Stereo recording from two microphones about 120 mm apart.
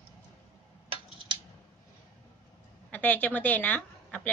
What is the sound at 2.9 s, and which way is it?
A woman's voice, 15° left (ahead or behind).